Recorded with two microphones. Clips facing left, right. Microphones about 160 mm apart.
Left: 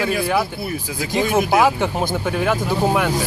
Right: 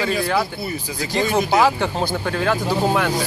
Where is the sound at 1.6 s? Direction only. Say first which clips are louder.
Left 1 dB; 15° left (ahead or behind).